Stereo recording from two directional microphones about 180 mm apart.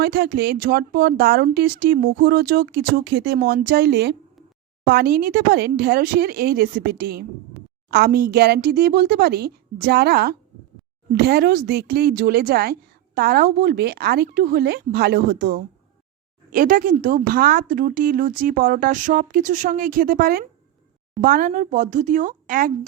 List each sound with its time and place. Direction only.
0.0 s speech: 65° right (ahead or behind)
16.5 s speech: 50° right (ahead or behind)